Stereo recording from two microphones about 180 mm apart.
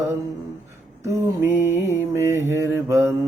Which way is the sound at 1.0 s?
15° right (ahead or behind).